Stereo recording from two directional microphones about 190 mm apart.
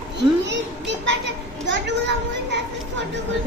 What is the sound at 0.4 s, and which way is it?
Children playing, 70° right (ahead or behind).